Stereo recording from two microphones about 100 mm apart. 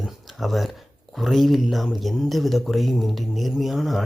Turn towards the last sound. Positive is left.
turn(degrees=0)  # may be behind; listen again after turning